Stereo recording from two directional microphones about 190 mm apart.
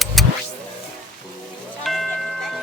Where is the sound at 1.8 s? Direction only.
Centre (ahead or behind).